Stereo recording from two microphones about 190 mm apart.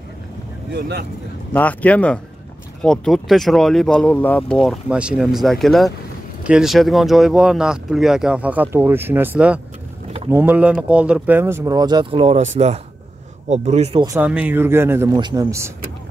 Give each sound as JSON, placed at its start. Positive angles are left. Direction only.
{"t": 0.7, "sound": "speech", "side_deg": -60}
{"t": 1.5, "sound": "speech", "side_deg": 10}
{"t": 14.0, "sound": "a man's voice", "side_deg": -10}